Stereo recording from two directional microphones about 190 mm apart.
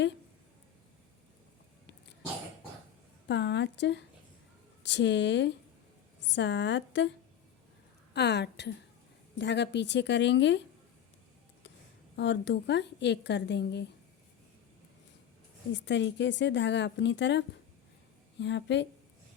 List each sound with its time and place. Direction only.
3.2 s a woman's voice: 65° left (ahead or behind)
8.1 s a woman's voice: 60° left (ahead or behind)
12.1 s a woman's voice: 70° left (ahead or behind)
15.7 s a woman's voice: 70° left (ahead or behind)